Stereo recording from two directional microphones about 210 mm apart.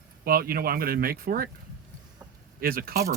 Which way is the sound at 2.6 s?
45° right (ahead or behind).